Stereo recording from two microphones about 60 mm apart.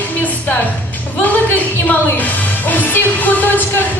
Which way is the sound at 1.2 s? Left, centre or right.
Left.